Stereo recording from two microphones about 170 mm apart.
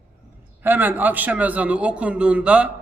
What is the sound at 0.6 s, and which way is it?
A man's voice, 10° right (ahead or behind).